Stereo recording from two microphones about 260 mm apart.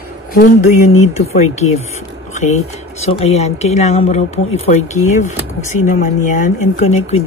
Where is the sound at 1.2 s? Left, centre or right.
Left.